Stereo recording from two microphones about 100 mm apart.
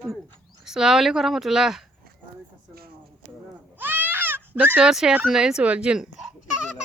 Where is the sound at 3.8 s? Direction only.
20° right (ahead or behind).